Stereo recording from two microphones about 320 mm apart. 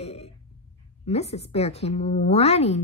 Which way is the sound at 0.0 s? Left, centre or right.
Centre.